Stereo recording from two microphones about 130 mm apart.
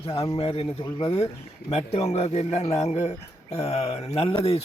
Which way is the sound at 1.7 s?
60° left (ahead or behind).